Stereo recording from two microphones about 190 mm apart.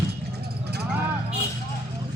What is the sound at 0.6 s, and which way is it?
Vehicle, 60° right (ahead or behind).